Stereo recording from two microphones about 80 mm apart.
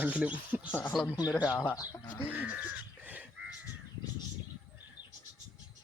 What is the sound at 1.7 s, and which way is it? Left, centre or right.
Speech, left.